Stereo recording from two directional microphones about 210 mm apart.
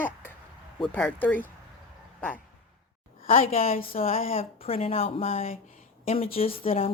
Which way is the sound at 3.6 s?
40° left (ahead or behind).